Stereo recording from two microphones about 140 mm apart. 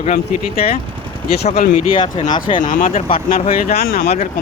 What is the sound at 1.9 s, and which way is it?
Speech, 35° left (ahead or behind).